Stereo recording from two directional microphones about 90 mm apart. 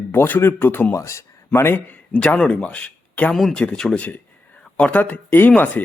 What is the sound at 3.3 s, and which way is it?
Speech, centre (ahead or behind).